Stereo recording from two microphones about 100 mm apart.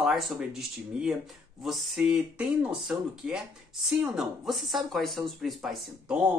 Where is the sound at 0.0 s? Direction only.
5° right (ahead or behind).